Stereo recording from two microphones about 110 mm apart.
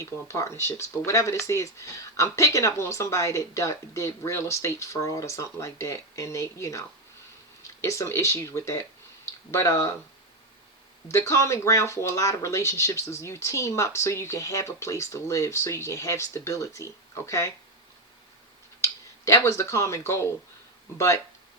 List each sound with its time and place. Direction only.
0.0 s speech: 25° left (ahead or behind)
11.1 s speech: 25° left (ahead or behind)
18.8 s speech: 25° left (ahead or behind)